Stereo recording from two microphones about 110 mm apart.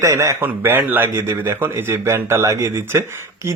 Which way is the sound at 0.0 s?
25° right (ahead or behind).